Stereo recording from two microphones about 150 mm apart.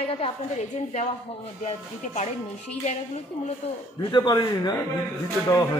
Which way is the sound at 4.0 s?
30° left (ahead or behind).